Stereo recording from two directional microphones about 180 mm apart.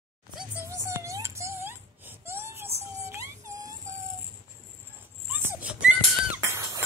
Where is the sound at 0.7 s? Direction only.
15° right (ahead or behind).